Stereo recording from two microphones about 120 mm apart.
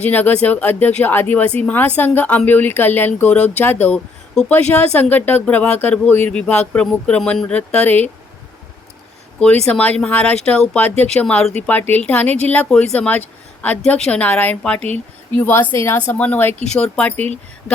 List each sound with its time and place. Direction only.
0.0 s speech: 15° left (ahead or behind)
9.6 s speech: 10° left (ahead or behind)